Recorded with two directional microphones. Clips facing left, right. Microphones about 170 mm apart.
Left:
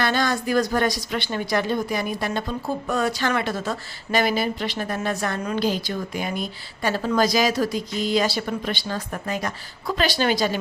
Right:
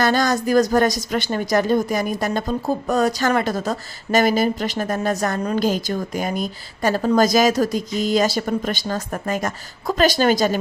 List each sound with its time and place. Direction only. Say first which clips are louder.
0.0 s a woman's voice: right 4 dB; 40° right (ahead or behind)